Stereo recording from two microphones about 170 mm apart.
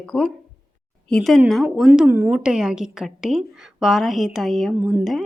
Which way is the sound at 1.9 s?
10° right (ahead or behind).